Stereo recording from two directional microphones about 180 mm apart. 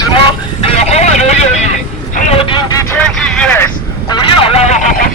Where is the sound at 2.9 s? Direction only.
5° left (ahead or behind).